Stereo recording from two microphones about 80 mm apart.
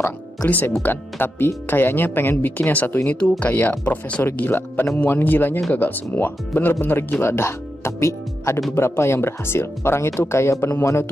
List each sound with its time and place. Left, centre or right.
0.5 s speech: left